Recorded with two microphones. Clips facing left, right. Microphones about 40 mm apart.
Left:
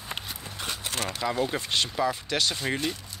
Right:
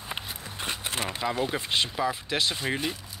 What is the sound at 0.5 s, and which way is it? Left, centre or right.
Speech, right.